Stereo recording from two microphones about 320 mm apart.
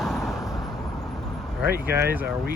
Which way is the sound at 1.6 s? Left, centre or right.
Centre.